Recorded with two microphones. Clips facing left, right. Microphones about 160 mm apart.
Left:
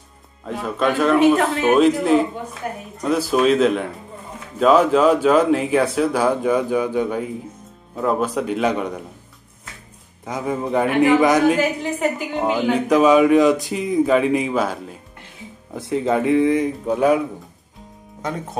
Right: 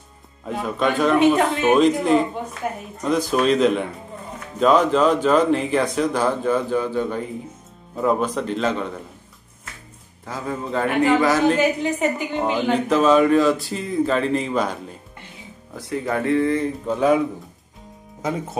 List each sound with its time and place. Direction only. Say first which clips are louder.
0.5 s a man's voice: left 1 dB; centre (ahead or behind)
10.2 s speech: left 4 dB; 15° left (ahead or behind)
15.7 s speech: left 5 dB; 20° left (ahead or behind)